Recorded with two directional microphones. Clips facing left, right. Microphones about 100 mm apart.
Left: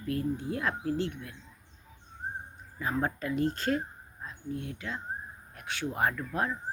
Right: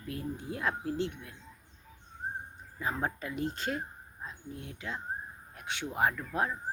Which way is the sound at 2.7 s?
15° right (ahead or behind).